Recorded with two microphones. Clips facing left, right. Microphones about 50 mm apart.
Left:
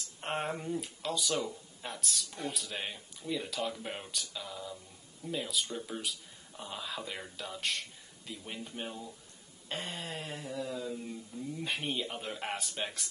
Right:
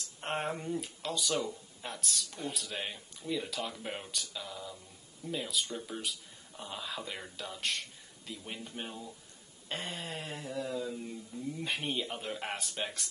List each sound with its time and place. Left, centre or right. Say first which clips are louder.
0.2 s speech: even; centre